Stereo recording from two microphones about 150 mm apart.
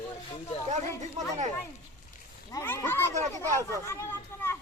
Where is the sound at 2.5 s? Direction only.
20° left (ahead or behind).